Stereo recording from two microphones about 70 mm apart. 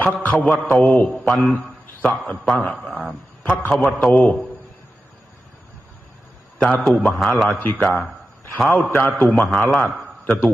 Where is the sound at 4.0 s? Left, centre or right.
Centre.